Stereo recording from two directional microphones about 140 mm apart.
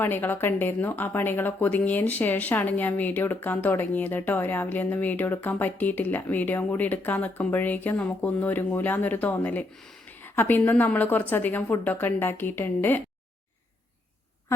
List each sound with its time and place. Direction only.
0.0 s speech: 15° left (ahead or behind)